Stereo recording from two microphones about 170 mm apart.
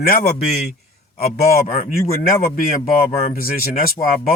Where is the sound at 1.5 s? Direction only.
60° left (ahead or behind).